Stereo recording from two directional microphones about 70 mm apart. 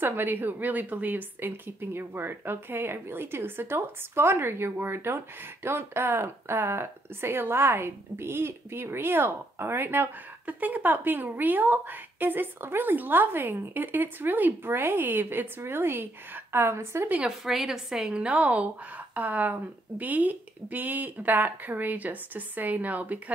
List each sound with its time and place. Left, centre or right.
0.0 s speech: right
17.5 s a woman's voice: centre; by 23.3 s right